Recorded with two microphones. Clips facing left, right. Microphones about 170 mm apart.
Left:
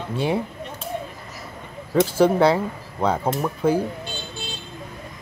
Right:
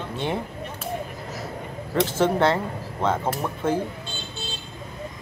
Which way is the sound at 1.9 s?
5° left (ahead or behind).